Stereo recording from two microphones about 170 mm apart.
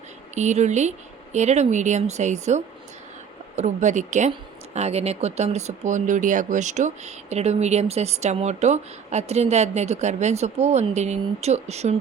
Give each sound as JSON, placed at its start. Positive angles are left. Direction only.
{"t": 0.3, "sound": "speech", "side_deg": -45}